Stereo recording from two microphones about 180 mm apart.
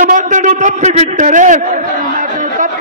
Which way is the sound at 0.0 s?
45° right (ahead or behind).